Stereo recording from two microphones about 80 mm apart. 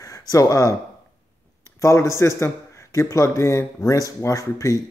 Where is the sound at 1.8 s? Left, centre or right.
Left.